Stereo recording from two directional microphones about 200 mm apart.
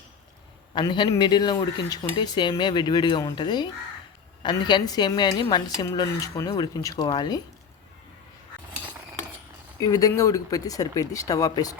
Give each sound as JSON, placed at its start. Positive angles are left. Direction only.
{"t": 0.7, "sound": "speech", "side_deg": 20}
{"t": 9.8, "sound": "speech", "side_deg": 15}